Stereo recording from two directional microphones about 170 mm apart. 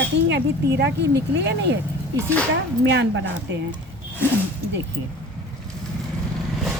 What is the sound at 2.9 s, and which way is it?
Speech, 90° right.